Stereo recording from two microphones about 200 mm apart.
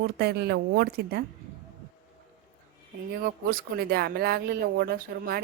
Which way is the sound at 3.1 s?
50° right (ahead or behind).